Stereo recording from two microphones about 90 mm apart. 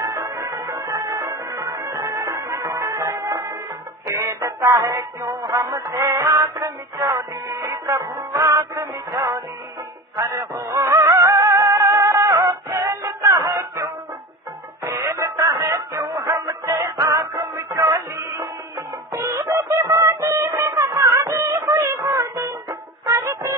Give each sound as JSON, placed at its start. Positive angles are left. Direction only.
{"t": 0.0, "sound": "music", "side_deg": -35}
{"t": 21.4, "sound": "music", "side_deg": -20}
{"t": 21.6, "sound": "a sound", "side_deg": -35}
{"t": 22.1, "sound": "music", "side_deg": -35}